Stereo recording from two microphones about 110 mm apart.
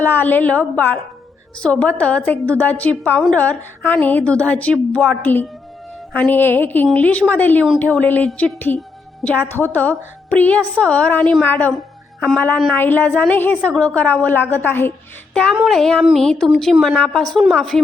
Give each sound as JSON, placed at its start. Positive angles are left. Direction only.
{"t": 0.0, "sound": "a woman's voice", "side_deg": 15}
{"t": 15.3, "sound": "speech", "side_deg": 10}